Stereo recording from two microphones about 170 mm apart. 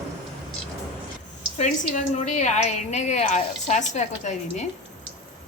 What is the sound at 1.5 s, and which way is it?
A woman's voice, 40° left (ahead or behind).